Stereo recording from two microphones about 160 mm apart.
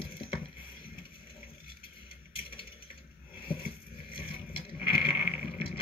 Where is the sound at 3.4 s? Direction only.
35° left (ahead or behind).